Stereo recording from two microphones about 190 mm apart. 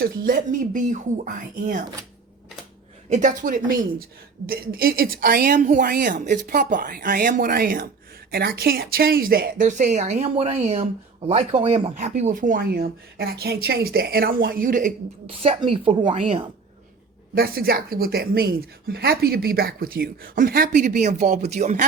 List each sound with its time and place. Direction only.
0.0 s a woman's voice: 45° right (ahead or behind)
3.1 s a woman's voice: 40° right (ahead or behind)
11.9 s a woman's voice: 40° right (ahead or behind)
15.7 s speech: 30° right (ahead or behind)
16.1 s speech: 40° right (ahead or behind)
17.3 s a woman's voice: 50° right (ahead or behind)